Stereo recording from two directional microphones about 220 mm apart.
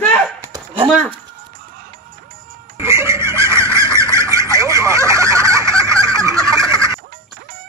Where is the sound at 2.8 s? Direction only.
10° right (ahead or behind).